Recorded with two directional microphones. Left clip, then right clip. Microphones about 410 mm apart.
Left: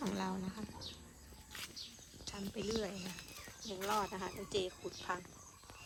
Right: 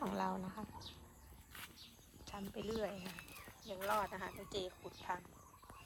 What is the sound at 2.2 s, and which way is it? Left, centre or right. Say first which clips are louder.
A woman's voice: left 3 dB; centre.